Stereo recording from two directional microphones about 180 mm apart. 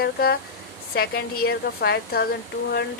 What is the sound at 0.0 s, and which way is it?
A woman's voice, 60° left (ahead or behind).